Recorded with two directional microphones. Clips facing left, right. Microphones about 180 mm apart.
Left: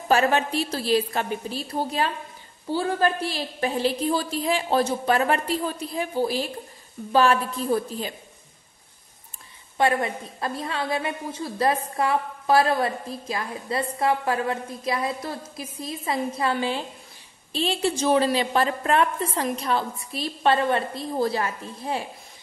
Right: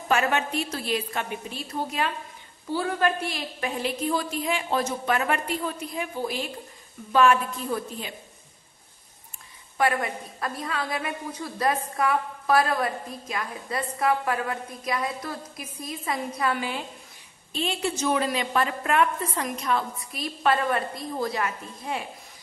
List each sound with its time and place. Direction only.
0.1 s a woman's voice: 30° left (ahead or behind)
9.8 s a woman's voice: 25° left (ahead or behind)